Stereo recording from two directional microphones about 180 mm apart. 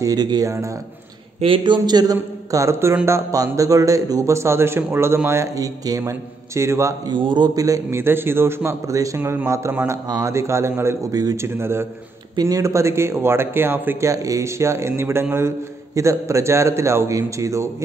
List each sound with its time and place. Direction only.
0.0 s a man's voice: 20° right (ahead or behind)